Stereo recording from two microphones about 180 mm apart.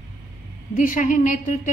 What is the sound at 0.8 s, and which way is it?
Speech, 45° left (ahead or behind).